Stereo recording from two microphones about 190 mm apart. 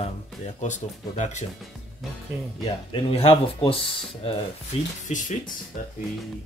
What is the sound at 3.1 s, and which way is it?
Speech, 30° left (ahead or behind).